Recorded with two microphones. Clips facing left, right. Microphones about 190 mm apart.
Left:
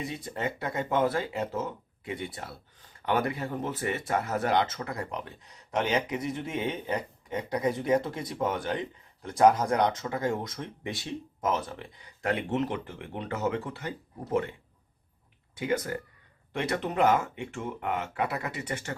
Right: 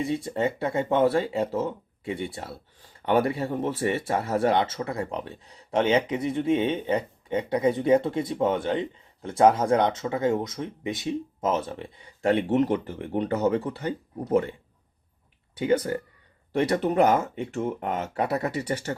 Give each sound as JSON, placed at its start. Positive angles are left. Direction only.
{"t": 0.0, "sound": "speech", "side_deg": -30}
{"t": 15.5, "sound": "speech", "side_deg": -30}